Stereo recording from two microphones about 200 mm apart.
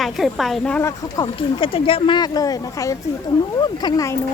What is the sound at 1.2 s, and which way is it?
Speech, 25° left (ahead or behind).